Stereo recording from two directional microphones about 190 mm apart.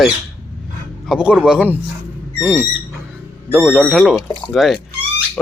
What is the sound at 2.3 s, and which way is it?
Owl, 10° right (ahead or behind).